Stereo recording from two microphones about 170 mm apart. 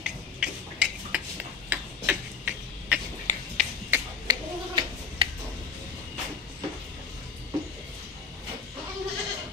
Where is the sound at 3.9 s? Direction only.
25° right (ahead or behind).